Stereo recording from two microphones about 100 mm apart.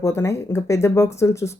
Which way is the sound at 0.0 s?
30° left (ahead or behind).